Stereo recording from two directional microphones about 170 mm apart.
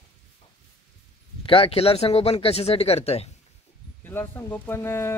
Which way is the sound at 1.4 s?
30° left (ahead or behind).